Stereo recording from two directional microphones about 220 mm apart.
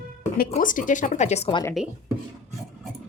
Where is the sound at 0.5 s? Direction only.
35° left (ahead or behind); by 1.7 s 20° left (ahead or behind).